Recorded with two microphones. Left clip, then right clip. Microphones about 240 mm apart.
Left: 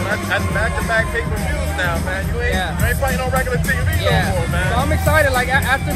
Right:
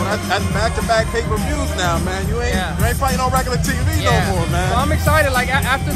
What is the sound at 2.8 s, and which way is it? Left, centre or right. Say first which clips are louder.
Speech: right 2 dB; right.